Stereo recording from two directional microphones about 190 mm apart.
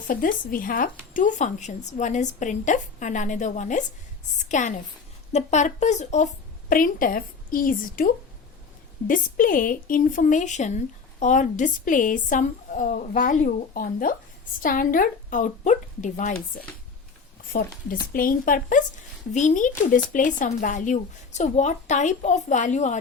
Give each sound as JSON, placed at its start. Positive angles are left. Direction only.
{"t": 0.1, "sound": "a woman's voice", "side_deg": 45}